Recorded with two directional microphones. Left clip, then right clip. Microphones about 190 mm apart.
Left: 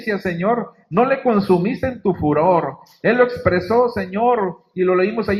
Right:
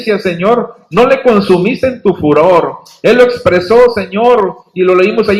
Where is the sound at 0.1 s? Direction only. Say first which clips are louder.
Right 9 dB; 40° left (ahead or behind).